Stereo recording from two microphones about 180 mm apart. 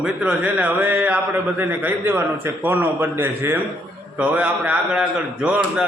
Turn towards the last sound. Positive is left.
turn(degrees=-5)  # may be behind; listen again after turning